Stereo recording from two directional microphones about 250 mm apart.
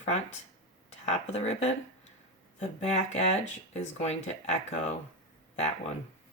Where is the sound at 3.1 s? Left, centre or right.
Left.